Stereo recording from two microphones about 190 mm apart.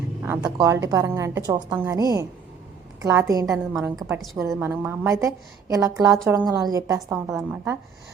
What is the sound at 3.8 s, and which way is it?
A woman's voice, 15° right (ahead or behind).